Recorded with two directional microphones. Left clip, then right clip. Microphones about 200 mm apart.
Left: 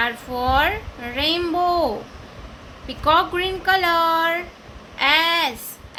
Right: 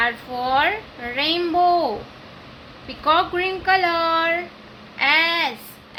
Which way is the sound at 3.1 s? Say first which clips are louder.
Left 1 dB; 10° left (ahead or behind).